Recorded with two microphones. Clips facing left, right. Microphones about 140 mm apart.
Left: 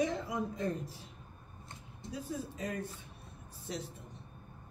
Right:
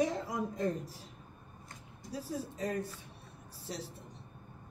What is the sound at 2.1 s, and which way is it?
Speech, 35° right (ahead or behind).